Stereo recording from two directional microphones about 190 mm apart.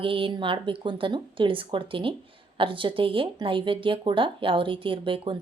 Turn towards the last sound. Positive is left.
turn(degrees=-25)  # may be behind; listen again after turning